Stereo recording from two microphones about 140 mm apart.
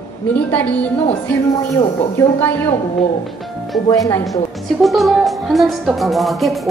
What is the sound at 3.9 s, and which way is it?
Speech, 25° left (ahead or behind).